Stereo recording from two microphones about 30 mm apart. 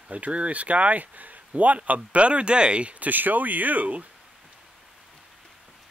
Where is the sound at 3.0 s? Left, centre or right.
Right.